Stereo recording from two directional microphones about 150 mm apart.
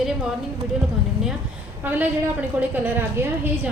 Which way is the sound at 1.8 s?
10° right (ahead or behind).